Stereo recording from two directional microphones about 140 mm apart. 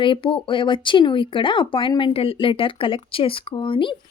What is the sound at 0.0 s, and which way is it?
Speech, 35° left (ahead or behind).